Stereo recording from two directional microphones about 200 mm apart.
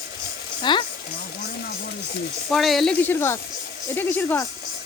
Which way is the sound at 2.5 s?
Centre (ahead or behind).